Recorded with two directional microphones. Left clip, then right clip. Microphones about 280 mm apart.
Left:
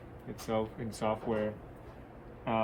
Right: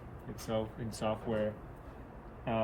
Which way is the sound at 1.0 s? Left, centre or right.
Centre.